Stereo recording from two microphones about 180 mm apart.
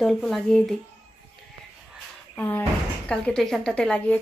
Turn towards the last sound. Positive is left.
turn(degrees=5)  # may be behind; listen again after turning